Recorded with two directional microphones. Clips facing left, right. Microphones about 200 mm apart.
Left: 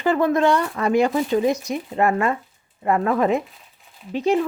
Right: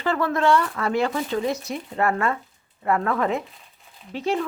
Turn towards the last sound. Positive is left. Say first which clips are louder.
# left 5 dB
turn(degrees=15)  # may be behind; listen again after turning